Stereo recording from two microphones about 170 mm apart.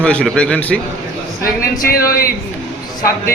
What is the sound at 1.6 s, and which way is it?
Speech, 60° left (ahead or behind).